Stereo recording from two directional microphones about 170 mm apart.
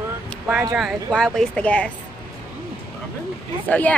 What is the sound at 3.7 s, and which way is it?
Speech, 10° left (ahead or behind).